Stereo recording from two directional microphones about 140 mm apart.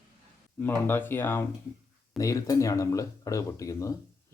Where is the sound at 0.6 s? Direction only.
15° left (ahead or behind).